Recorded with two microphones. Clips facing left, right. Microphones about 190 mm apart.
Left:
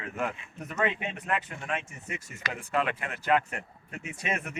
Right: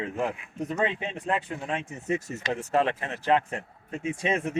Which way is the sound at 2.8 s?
30° right (ahead or behind).